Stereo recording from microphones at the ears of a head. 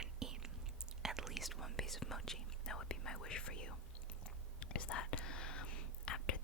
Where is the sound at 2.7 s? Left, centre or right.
Left.